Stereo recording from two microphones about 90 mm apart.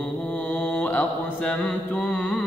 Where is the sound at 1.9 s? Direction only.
15° left (ahead or behind).